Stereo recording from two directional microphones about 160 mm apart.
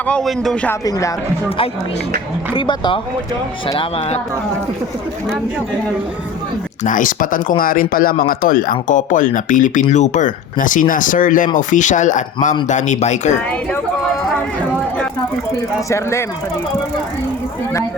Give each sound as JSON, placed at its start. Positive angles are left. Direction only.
{"t": 0.0, "sound": "a man's voice", "side_deg": 5}
{"t": 0.9, "sound": "speech", "side_deg": 20}
{"t": 2.5, "sound": "speech", "side_deg": 30}
{"t": 6.8, "sound": "speech", "side_deg": 55}
{"t": 15.9, "sound": "a man's voice", "side_deg": 15}